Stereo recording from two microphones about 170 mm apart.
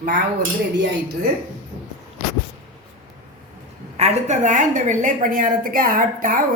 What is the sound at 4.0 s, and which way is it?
A woman's voice, 45° right (ahead or behind).